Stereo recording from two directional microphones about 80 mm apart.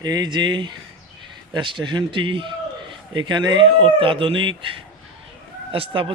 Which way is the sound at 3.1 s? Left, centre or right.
Right.